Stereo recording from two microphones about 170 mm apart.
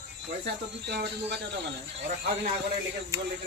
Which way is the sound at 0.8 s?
80° right.